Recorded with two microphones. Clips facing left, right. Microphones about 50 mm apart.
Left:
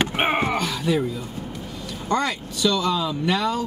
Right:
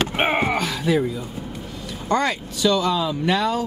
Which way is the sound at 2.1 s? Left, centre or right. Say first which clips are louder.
Right 2 dB; centre.